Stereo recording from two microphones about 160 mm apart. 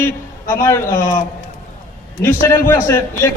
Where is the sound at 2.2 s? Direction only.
15° left (ahead or behind).